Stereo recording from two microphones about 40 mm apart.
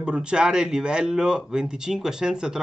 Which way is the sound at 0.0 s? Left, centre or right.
Right.